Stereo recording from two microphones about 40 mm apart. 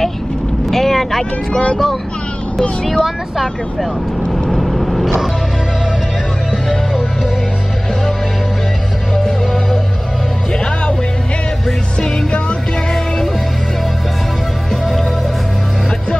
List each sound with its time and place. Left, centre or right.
0.7 s boat: centre
1.5 s speech: left
2.8 s speech: centre
4.3 s vehicle: centre
9.2 s music: centre